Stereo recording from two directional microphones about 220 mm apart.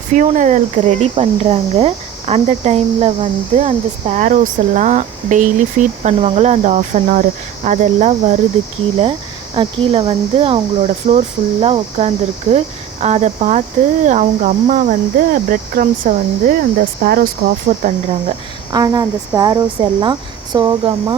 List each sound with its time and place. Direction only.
0.1 s speech: 35° right (ahead or behind)
9.6 s a woman's voice: 25° right (ahead or behind)
17.8 s a woman's voice: 25° right (ahead or behind)